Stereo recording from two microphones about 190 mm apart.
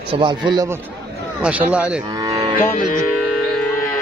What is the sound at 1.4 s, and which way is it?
Speech, 5° right (ahead or behind).